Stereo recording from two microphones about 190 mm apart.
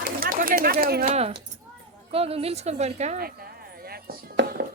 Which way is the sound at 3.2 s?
55° right (ahead or behind).